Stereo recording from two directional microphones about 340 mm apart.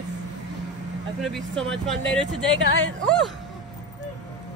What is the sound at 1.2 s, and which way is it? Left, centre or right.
Speech, centre.